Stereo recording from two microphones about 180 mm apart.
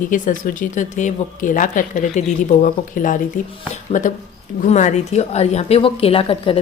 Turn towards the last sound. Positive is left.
turn(degrees=30)  # may be behind; listen again after turning